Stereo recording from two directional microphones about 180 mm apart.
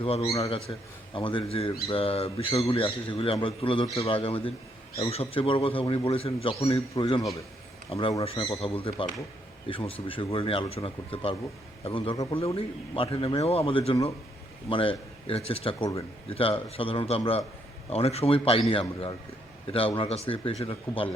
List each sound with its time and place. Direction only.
0.0 s speech: 35° left (ahead or behind)
6.9 s speech: 20° left (ahead or behind)